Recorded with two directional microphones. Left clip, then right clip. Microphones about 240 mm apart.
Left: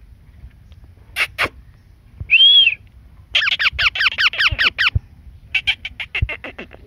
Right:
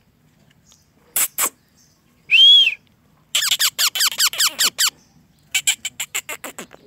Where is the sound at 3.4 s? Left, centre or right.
Right.